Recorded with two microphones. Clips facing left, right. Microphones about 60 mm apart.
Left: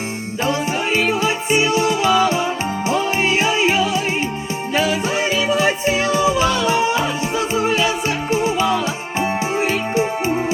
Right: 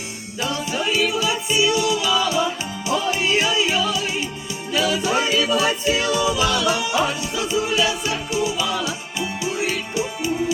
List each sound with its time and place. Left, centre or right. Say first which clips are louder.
0.4 s music: left 3 dB; left